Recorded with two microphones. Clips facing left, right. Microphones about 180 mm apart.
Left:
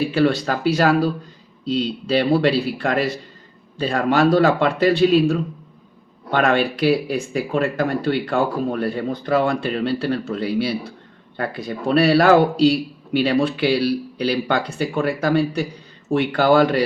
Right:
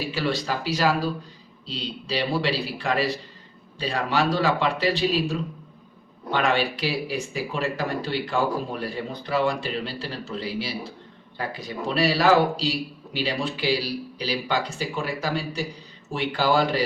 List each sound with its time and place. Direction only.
0.0 s speech: 55° left (ahead or behind)